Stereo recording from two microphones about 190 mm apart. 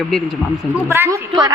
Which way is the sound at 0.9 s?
15° right (ahead or behind).